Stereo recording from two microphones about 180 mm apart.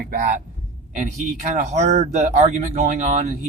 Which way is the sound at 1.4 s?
40° right (ahead or behind).